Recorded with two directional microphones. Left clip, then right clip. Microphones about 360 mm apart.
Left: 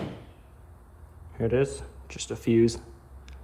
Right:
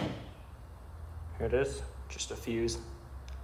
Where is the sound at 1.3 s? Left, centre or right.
Left.